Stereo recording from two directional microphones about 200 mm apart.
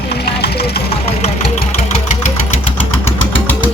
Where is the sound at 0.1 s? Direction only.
55° left (ahead or behind).